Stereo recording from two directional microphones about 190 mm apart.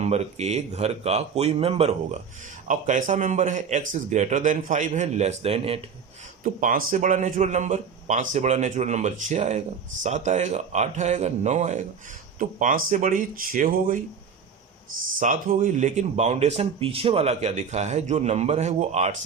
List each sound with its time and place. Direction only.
0.0 s a man's voice: 35° right (ahead or behind)
6.4 s a man's voice: 45° right (ahead or behind)
15.2 s a man's voice: 40° right (ahead or behind)